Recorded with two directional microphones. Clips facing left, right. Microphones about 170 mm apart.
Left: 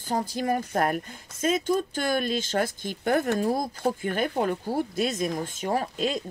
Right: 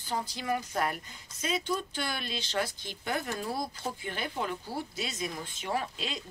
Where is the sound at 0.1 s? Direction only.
50° left (ahead or behind).